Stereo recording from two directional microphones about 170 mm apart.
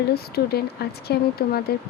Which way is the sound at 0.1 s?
70° left (ahead or behind).